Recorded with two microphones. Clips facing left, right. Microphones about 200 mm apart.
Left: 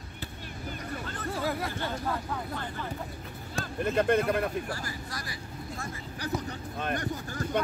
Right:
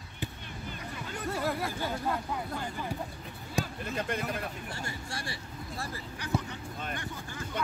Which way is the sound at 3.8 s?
60° left (ahead or behind).